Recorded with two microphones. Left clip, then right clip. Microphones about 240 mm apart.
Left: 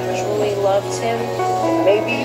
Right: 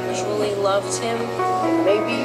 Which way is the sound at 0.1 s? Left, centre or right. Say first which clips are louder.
Left 3 dB; right.